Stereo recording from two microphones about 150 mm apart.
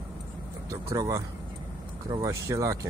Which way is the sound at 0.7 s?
20° right (ahead or behind).